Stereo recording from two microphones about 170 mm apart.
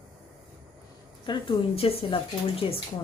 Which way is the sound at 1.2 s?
25° left (ahead or behind).